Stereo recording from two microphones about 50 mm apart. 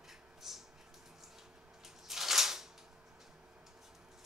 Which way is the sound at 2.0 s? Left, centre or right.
Centre.